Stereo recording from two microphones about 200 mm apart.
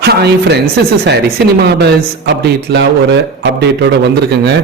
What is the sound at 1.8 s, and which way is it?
A man's voice, 60° right (ahead or behind).